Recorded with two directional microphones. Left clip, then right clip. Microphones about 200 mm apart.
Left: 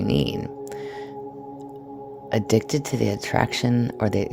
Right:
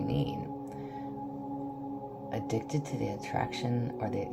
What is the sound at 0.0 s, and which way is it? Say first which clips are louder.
Speech: left 10 dB; 60° left (ahead or behind).